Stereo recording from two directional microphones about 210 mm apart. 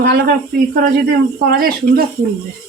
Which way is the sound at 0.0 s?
50° right (ahead or behind).